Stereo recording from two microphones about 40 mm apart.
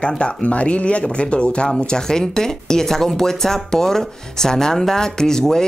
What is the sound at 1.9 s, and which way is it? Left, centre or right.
Speech, centre.